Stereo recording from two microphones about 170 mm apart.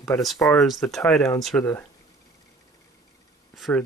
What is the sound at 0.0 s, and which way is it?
Speech, centre (ahead or behind).